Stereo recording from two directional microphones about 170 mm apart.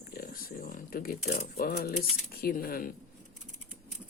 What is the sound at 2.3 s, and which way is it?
Speech, 60° left (ahead or behind).